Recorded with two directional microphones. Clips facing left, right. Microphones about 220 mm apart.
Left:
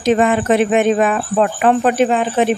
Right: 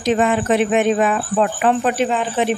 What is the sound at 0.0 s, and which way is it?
Speech, 55° left (ahead or behind).